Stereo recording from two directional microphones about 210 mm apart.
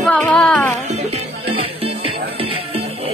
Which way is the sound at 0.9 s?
30° right (ahead or behind).